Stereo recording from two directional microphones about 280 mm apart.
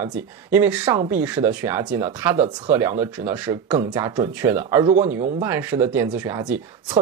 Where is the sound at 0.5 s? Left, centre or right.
Centre.